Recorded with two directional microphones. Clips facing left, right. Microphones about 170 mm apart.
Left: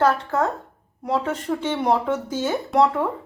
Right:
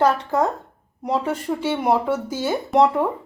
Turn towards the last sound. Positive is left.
turn(degrees=-15)  # may be behind; listen again after turning